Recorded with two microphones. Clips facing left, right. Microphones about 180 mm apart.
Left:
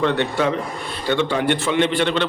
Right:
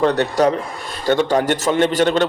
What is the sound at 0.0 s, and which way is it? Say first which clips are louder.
A man's voice: right 4 dB; 40° right (ahead or behind).